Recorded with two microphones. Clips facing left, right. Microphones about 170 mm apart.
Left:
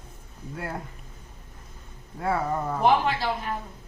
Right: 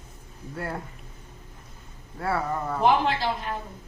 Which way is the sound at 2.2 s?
15° left (ahead or behind).